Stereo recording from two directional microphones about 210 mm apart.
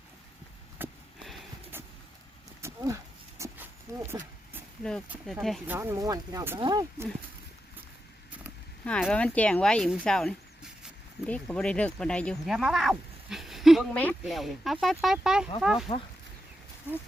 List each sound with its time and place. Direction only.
0.8 s a sound: centre (ahead or behind)
1.7 s vehicle: 10° right (ahead or behind)
2.6 s horse: 15° right (ahead or behind)
3.9 s a sound: 15° right (ahead or behind)
4.8 s speech: 5° left (ahead or behind)
5.7 s speech: 15° right (ahead or behind)
8.8 s speech: 5° left (ahead or behind)